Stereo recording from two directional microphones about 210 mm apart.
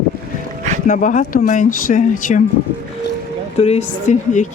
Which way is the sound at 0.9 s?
35° left (ahead or behind).